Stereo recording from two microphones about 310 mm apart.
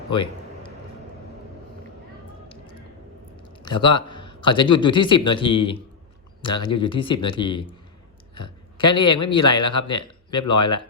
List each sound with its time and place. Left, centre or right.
3.6 s a man's voice: centre